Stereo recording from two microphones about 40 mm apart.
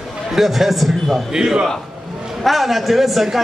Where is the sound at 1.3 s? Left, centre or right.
Centre.